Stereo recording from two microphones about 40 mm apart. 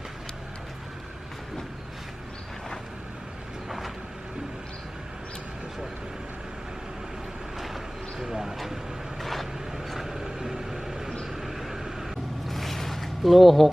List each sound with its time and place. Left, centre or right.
3.7 s vehicle: centre
8.2 s vehicle: centre
12.5 s a sound: centre